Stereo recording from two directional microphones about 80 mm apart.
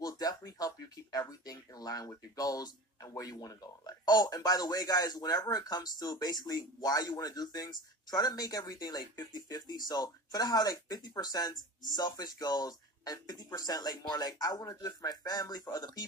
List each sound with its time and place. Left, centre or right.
0.0 s speech: left